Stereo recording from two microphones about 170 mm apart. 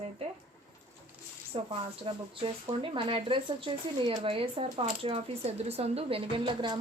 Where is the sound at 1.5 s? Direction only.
30° right (ahead or behind).